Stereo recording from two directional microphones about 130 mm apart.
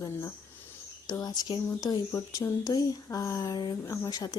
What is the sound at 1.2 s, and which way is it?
Speech, 30° left (ahead or behind).